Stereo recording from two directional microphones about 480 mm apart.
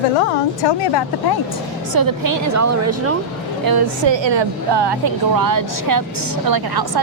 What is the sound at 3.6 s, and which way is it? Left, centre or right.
A woman's voice, right.